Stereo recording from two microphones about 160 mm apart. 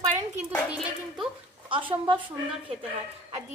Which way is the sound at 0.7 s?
5° right (ahead or behind).